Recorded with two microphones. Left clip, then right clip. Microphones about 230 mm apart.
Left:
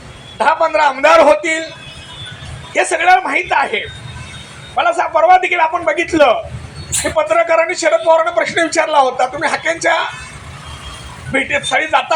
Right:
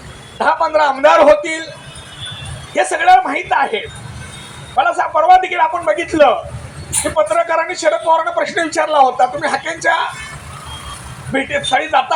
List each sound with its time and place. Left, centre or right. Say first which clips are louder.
0.3 s a man's voice: left 1 dB; left
2.7 s a man's voice: right 1 dB; left
11.3 s a man's voice: left 1 dB; left